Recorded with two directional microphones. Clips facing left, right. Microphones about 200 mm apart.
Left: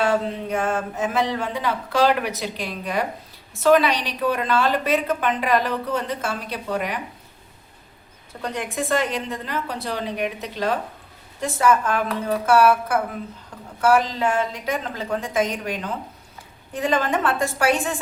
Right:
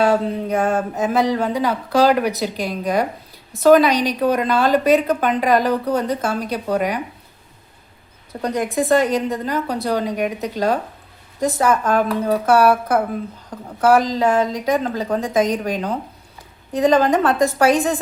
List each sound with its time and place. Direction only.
0.0 s a woman's voice: 40° right (ahead or behind)
8.3 s a woman's voice: 40° right (ahead or behind)